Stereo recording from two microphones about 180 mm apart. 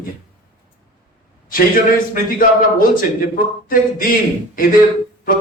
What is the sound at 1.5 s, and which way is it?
A man's voice, 50° left (ahead or behind).